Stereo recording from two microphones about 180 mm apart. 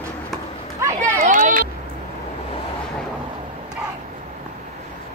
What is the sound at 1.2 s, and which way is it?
Vehicle, 45° right (ahead or behind).